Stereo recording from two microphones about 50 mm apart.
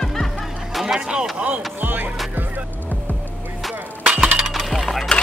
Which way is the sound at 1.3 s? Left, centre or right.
Right.